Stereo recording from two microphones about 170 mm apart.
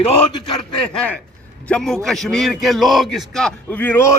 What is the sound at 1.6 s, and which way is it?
A man's voice, 5° left (ahead or behind).